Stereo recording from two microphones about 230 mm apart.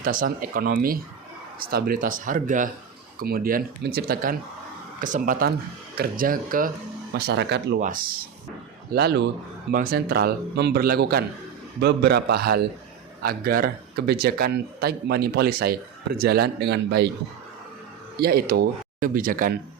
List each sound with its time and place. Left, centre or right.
0.0 s a man's voice: right
7.8 s a man's voice: right
18.2 s a man's voice: right